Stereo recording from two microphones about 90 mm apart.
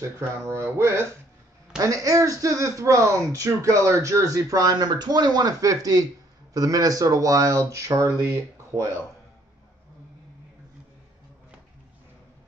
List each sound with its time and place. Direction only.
0.0 s speech: 30° right (ahead or behind)
1.8 s speech: 40° right (ahead or behind)